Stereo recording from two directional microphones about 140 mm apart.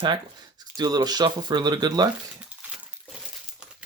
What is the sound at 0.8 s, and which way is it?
Speech, 30° right (ahead or behind).